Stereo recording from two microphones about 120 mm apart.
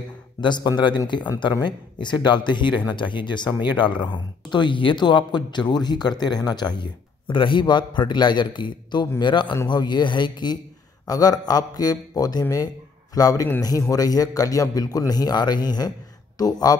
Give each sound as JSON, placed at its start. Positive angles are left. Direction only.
{"t": 0.4, "sound": "a man's voice", "side_deg": 40}